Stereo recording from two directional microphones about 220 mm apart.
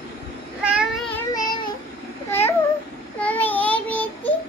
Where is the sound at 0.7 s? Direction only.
5° right (ahead or behind).